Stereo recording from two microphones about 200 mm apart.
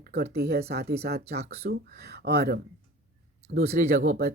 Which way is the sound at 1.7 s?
55° right (ahead or behind).